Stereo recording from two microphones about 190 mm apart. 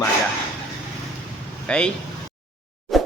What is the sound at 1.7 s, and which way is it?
Speech, 5° left (ahead or behind).